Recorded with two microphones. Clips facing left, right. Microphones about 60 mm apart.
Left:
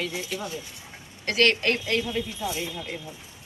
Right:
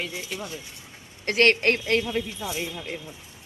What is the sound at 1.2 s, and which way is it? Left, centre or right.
Speech, right.